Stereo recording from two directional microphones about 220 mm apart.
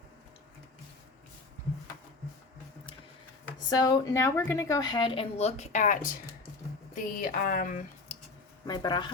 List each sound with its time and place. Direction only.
3.7 s a woman's voice: 15° left (ahead or behind); by 7.9 s 40° left (ahead or behind)
8.6 s a woman's voice: 20° left (ahead or behind)